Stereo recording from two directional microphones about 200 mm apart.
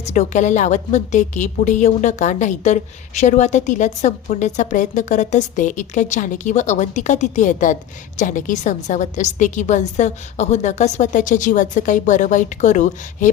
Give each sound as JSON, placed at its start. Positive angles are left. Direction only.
{"t": 0.0, "sound": "a woman's voice", "side_deg": 35}